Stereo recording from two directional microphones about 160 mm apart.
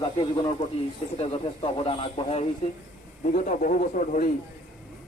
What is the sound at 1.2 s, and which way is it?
Speech, 35° left (ahead or behind).